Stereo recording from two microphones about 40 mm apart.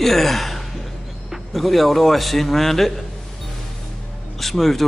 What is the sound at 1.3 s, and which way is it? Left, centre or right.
Speech, centre.